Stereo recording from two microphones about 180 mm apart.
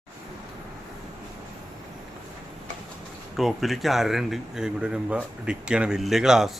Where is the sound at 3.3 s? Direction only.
Centre (ahead or behind).